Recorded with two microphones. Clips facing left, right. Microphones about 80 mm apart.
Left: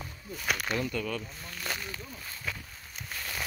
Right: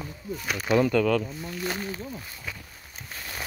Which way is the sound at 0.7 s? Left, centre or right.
Right.